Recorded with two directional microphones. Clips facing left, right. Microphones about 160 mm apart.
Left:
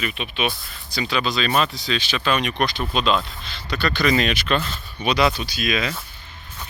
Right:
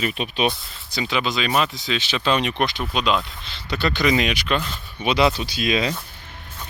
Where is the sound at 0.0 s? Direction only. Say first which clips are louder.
Right 3 dB; 40° right (ahead or behind).